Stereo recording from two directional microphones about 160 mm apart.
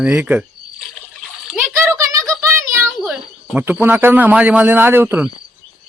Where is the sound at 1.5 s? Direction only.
15° right (ahead or behind).